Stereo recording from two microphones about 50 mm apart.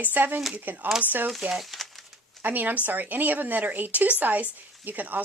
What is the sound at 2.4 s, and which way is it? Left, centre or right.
Speech, right.